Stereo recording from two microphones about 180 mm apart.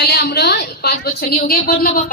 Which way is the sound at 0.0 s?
60° left (ahead or behind).